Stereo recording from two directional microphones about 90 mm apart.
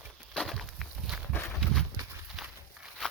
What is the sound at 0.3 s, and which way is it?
Walk, centre (ahead or behind).